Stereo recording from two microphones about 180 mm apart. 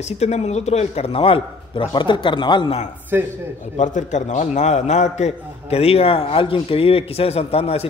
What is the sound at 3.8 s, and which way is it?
A man's voice, 45° left (ahead or behind).